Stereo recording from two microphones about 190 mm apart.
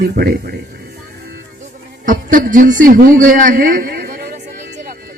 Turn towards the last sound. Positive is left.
turn(degrees=-50)  # may be behind; listen again after turning